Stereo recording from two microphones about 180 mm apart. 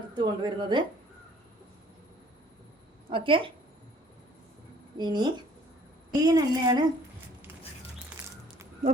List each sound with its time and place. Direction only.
0.2 s a woman's voice: 25° right (ahead or behind)
3.1 s a woman's voice: 30° right (ahead or behind)
4.9 s a woman's voice: 25° right (ahead or behind)
8.2 s a sound: 5° right (ahead or behind)